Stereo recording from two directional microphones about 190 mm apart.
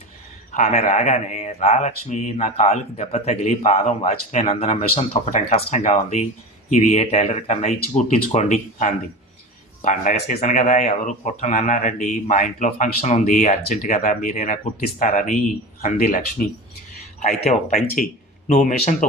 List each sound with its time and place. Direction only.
0.5 s speech: 40° left (ahead or behind)